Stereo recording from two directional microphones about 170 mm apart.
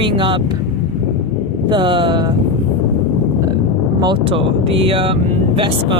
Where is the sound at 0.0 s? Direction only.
30° right (ahead or behind).